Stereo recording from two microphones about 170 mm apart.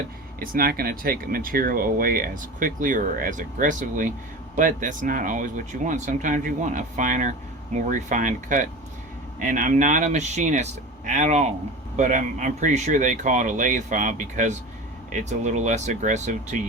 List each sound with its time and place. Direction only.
0.3 s speech: 60° right (ahead or behind)